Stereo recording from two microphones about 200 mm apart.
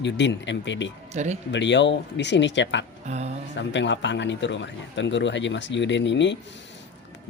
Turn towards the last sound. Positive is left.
turn(degrees=65)  # may be behind; listen again after turning